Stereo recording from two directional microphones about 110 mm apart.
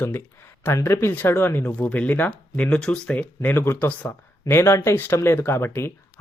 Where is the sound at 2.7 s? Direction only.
5° left (ahead or behind).